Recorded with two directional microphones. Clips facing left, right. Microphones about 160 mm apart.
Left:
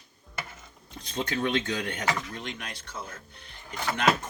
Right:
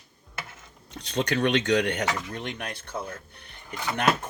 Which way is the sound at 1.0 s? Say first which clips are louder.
Right 5 dB; 70° right (ahead or behind).